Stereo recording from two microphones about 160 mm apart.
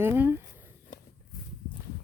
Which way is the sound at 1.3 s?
65° left (ahead or behind).